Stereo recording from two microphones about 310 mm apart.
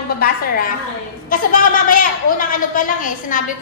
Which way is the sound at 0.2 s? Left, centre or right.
Left.